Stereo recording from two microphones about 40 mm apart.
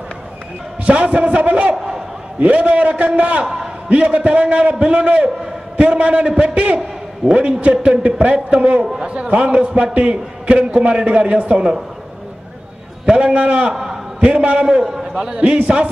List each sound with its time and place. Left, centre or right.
0.8 s a man's voice: right
1.8 s a man's voice: centre
2.4 s a man's voice: right
13.0 s a man's voice: right
14.8 s a man's voice: centre
15.3 s a man's voice: right